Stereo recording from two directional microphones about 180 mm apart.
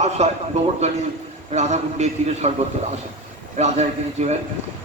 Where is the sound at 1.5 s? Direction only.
40° right (ahead or behind).